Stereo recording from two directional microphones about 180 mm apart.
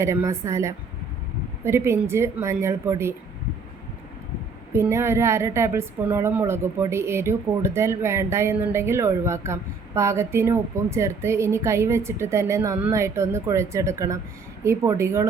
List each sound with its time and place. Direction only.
0.0 s a woman's voice: 15° right (ahead or behind)
4.7 s a woman's voice: 15° right (ahead or behind)